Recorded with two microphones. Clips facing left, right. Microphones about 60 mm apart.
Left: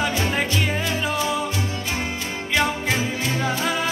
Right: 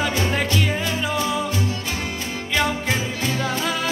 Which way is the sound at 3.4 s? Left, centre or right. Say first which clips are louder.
Left 2 dB; centre.